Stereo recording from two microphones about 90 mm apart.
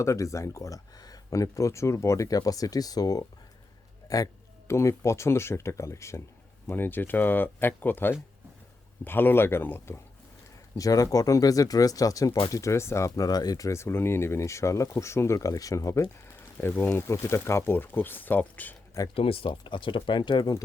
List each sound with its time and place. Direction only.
0.0 s speech: 35° left (ahead or behind)
10.8 s speech: 40° left (ahead or behind)
13.7 s speech: 30° left (ahead or behind)
16.6 s speech: 25° left (ahead or behind)
19.1 s speech: 90° left; by 20.5 s 55° left (ahead or behind)